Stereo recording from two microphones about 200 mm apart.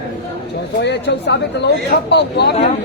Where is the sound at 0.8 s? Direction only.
60° left (ahead or behind).